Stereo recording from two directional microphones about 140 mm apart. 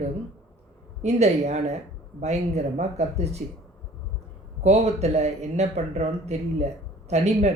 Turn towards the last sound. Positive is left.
turn(degrees=-50)  # may be behind; listen again after turning